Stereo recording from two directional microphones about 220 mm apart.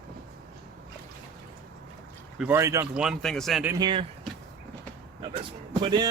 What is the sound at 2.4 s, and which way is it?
Speech, 10° right (ahead or behind).